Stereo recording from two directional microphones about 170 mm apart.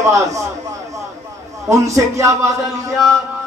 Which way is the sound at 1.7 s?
20° right (ahead or behind).